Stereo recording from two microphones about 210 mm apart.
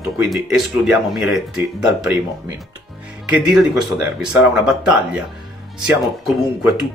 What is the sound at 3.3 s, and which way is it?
Speech, 5° right (ahead or behind).